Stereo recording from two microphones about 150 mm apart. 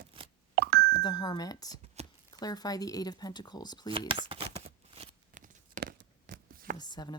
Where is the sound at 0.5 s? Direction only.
90° right.